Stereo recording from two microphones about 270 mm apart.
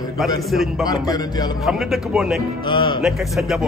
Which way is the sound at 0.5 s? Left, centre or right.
Centre.